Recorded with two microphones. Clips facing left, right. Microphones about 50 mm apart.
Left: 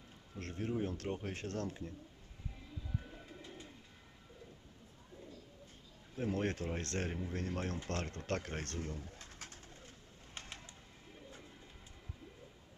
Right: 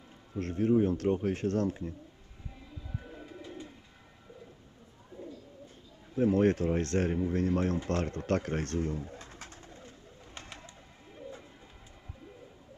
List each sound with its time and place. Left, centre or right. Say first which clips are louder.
0.3 s speech: right 12 dB; centre
2.9 s bird: right 4 dB; right
6.1 s speech: right 11 dB; centre
11.1 s bird: right 10 dB; centre